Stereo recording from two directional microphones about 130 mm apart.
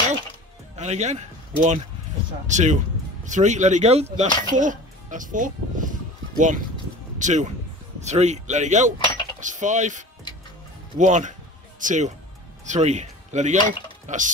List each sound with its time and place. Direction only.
0.7 s speech: 60° right (ahead or behind)
4.5 s music: 80° right
7.2 s speech: 70° right (ahead or behind)